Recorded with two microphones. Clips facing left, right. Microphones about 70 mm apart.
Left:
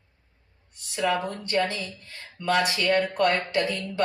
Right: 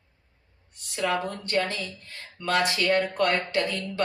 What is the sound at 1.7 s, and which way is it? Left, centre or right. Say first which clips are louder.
Speech: even; left.